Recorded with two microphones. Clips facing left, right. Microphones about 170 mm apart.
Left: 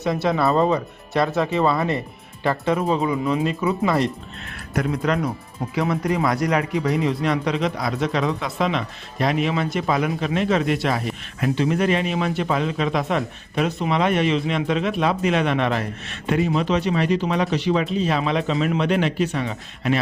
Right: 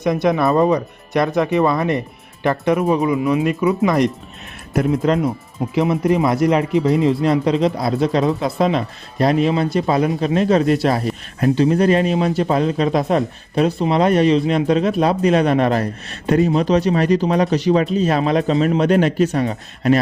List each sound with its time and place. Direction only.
0.0 s speech: 15° right (ahead or behind); by 20.0 s 40° right (ahead or behind)